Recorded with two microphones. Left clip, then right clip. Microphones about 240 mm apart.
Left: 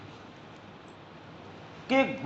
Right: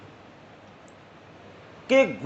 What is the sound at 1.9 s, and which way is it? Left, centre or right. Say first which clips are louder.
Speech: right 6 dB; right.